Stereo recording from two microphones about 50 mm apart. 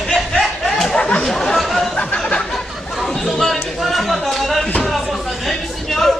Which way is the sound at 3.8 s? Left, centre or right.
Centre.